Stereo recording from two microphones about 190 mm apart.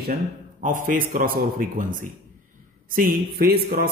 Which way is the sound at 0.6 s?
45° right (ahead or behind).